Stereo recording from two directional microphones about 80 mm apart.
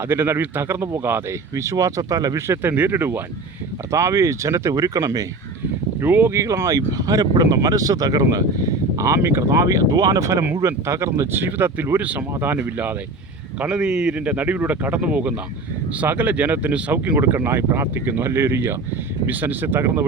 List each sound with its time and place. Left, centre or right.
0.0 s speech: right
2.5 s speech: right
3.9 s speech: right
6.0 s speech: right
6.3 s speech: right
9.0 s speech: right
13.6 s a man's voice: centre